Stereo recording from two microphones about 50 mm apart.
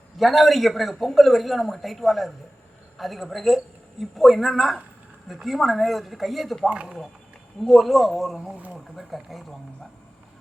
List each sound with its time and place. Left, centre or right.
0.2 s a man's voice: centre
6.7 s speech: right
7.7 s a man's voice: centre